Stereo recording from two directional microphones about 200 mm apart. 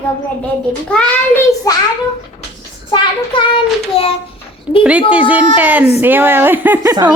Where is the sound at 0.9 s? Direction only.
5° left (ahead or behind).